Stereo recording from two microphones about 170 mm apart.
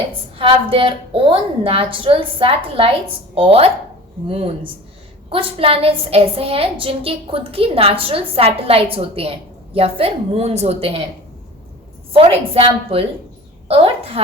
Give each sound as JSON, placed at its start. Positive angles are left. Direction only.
{"t": 0.3, "sound": "a woman's voice", "side_deg": -30}
{"t": 12.1, "sound": "a woman's voice", "side_deg": -35}